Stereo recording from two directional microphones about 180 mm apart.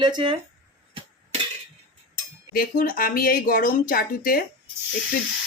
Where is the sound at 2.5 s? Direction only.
50° left (ahead or behind).